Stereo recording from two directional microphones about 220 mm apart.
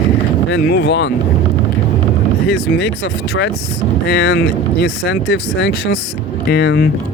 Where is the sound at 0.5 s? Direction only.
50° left (ahead or behind).